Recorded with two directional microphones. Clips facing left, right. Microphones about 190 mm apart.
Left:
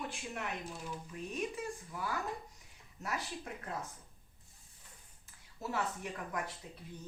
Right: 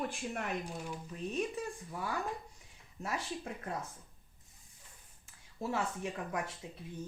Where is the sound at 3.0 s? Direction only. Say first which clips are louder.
Right 2 dB; 30° right (ahead or behind).